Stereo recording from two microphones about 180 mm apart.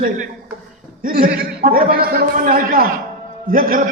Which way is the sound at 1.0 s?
55° right (ahead or behind).